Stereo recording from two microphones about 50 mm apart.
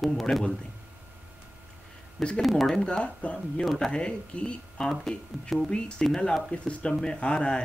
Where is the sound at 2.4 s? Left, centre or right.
Centre.